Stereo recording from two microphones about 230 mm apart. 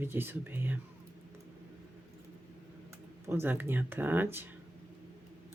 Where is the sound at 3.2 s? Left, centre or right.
Centre.